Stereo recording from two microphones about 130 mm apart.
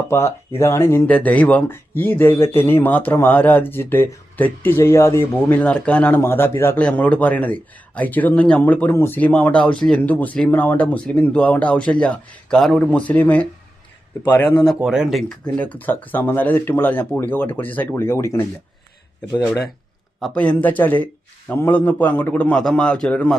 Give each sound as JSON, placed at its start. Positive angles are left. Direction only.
{"t": 0.1, "sound": "speech", "side_deg": 20}
{"t": 14.8, "sound": "speech", "side_deg": -5}
{"t": 20.3, "sound": "speech", "side_deg": 10}